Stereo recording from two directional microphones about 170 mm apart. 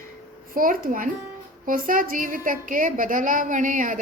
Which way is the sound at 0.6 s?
55° right (ahead or behind).